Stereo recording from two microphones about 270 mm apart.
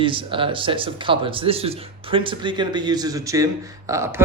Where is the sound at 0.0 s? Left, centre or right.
Centre.